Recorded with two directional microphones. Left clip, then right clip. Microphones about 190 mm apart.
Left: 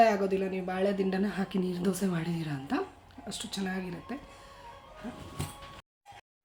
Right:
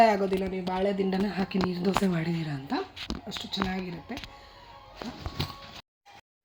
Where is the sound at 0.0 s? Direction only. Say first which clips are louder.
Right 2 dB; 25° right (ahead or behind).